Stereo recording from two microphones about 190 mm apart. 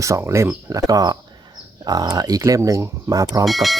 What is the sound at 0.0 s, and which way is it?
Speech, 15° right (ahead or behind).